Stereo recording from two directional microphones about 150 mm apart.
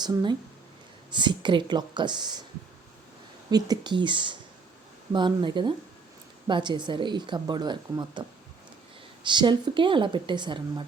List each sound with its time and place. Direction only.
0.0 s a woman's voice: 30° right (ahead or behind)
3.5 s a woman's voice: 30° right (ahead or behind)
9.2 s a woman's voice: 30° right (ahead or behind)